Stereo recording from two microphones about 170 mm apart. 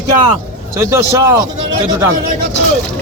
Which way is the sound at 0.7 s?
15° right (ahead or behind).